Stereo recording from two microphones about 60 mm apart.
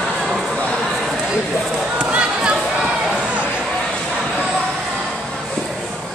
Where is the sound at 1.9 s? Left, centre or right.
Centre.